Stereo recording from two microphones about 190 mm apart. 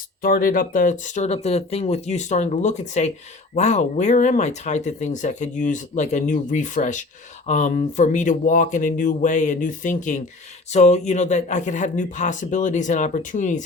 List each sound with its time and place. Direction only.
0.2 s speech: 50° left (ahead or behind)